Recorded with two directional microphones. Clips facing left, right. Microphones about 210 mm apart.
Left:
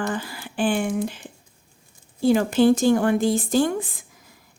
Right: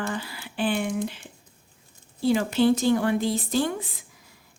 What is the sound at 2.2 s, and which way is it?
Speech, 50° left (ahead or behind).